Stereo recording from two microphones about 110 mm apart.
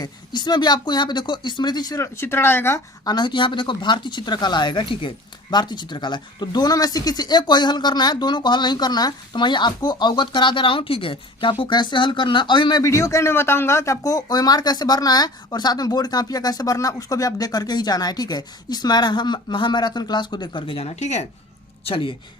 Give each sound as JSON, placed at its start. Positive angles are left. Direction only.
{"t": 0.0, "sound": "speech", "side_deg": 40}
{"t": 3.0, "sound": "speech", "side_deg": 40}
{"t": 12.8, "sound": "speech", "side_deg": 30}
{"t": 21.8, "sound": "speech", "side_deg": 55}